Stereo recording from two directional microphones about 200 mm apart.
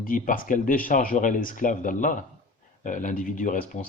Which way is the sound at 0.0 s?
45° left (ahead or behind).